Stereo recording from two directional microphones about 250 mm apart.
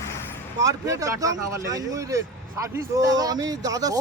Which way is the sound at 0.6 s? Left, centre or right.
Centre.